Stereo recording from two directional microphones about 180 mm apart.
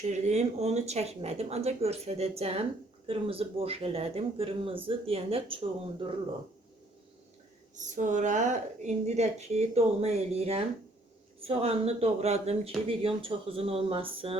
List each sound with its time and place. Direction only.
0.1 s speech: 40° right (ahead or behind)
7.8 s speech: 45° right (ahead or behind)